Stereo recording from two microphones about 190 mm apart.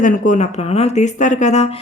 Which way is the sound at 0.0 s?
40° left (ahead or behind).